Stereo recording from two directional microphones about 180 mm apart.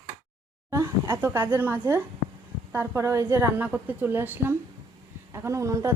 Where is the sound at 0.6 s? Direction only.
15° right (ahead or behind).